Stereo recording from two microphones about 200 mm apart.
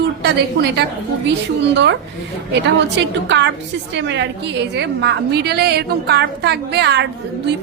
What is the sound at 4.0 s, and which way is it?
A woman's voice, 60° right (ahead or behind).